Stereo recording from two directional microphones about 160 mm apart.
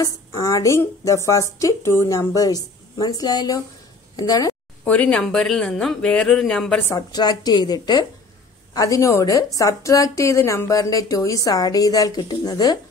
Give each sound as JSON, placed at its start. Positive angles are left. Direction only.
{"t": 0.0, "sound": "a woman's voice", "side_deg": 20}
{"t": 4.8, "sound": "speech", "side_deg": 10}
{"t": 6.9, "sound": "a woman's voice", "side_deg": 25}